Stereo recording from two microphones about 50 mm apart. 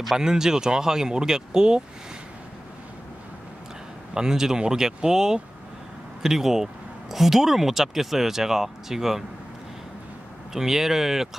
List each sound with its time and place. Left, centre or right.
0.2 s speech: centre
4.1 s speech: centre
10.5 s speech: centre